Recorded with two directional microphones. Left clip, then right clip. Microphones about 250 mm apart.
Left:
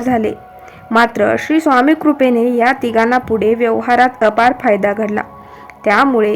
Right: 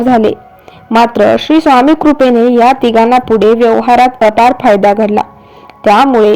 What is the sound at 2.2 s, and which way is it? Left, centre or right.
Speech, centre.